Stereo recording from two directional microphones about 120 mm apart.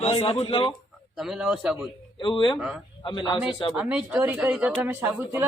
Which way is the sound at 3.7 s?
10° right (ahead or behind).